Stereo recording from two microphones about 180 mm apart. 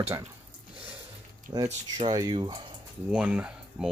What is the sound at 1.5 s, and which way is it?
Speech, 20° right (ahead or behind).